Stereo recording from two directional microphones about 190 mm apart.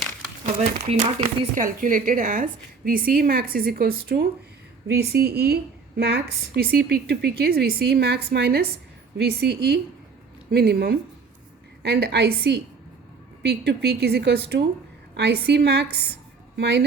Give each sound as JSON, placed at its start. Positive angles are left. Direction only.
{"t": 0.6, "sound": "speech", "side_deg": -30}
{"t": 1.2, "sound": "a woman's voice", "side_deg": -45}